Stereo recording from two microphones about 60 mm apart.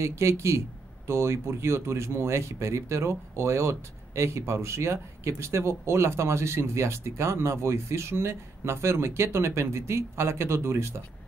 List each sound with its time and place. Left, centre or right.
0.0 s speech: right